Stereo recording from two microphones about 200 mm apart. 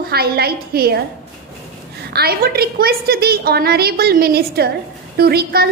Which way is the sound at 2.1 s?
50° right (ahead or behind).